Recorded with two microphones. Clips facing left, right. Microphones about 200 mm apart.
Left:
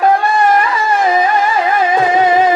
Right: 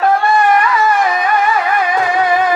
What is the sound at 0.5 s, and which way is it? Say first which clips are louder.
Music: right 1 dB; 25° left (ahead or behind).